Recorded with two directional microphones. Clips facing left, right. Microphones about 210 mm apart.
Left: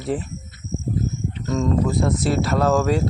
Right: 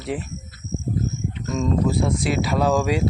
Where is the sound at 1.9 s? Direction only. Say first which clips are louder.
Left 1 dB; centre (ahead or behind).